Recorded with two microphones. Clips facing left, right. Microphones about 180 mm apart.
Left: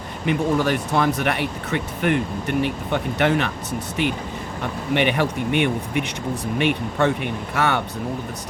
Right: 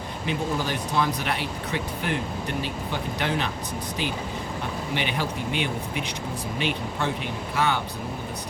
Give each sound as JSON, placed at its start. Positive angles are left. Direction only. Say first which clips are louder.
{"t": 0.3, "sound": "speech", "louder": "left 8 dB", "side_deg": 65}